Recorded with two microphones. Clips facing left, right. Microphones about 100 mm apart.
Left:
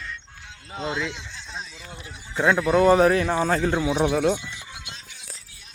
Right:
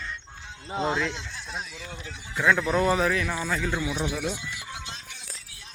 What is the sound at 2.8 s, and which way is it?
Speech, 35° left (ahead or behind).